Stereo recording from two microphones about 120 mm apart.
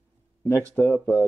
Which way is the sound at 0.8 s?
15° left (ahead or behind).